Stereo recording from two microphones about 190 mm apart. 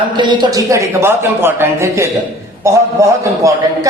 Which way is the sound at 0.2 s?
25° right (ahead or behind).